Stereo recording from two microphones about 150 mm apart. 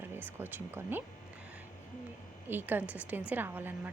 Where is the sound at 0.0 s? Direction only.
15° right (ahead or behind).